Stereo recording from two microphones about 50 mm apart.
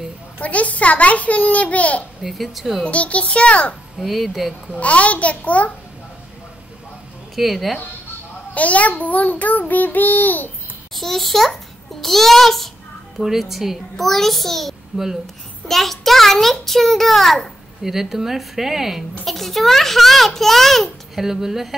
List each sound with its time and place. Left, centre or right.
0.4 s a child's voice: left
2.2 s a child's voice: centre
2.8 s a child's voice: left
4.0 s a child's voice: centre
4.7 s a child's voice: left
7.3 s a child's voice: centre
8.5 s child singing: left
11.0 s a child's voice: centre